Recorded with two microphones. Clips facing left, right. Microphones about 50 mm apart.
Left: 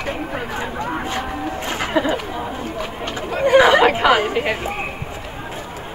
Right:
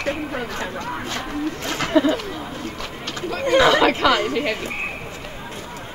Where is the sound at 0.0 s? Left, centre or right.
Centre.